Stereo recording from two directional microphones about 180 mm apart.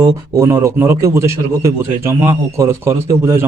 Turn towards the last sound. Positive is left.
turn(degrees=-15)  # may be behind; listen again after turning